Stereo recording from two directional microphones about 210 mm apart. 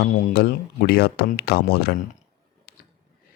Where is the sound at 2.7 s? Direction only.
45° left (ahead or behind).